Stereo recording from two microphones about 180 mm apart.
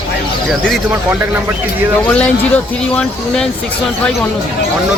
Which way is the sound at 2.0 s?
10° left (ahead or behind).